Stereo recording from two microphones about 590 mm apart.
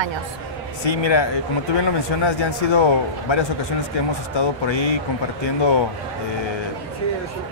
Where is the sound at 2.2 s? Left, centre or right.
Left.